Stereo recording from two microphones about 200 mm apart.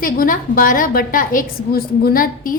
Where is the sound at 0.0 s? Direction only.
45° left (ahead or behind).